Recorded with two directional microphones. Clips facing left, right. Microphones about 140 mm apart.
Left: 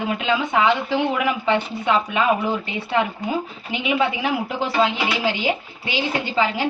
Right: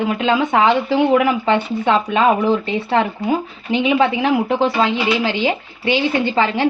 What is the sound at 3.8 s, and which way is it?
Speech, 60° right (ahead or behind).